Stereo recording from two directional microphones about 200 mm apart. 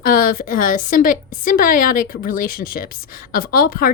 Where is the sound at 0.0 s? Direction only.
45° left (ahead or behind).